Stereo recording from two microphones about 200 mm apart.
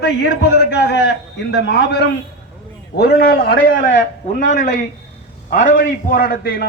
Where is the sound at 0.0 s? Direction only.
60° left (ahead or behind).